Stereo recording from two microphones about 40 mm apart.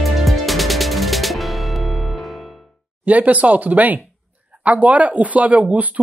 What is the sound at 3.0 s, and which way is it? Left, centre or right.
Speech, right.